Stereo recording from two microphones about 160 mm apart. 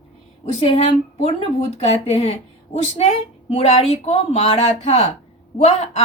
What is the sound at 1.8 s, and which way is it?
A woman's voice, 40° left (ahead or behind).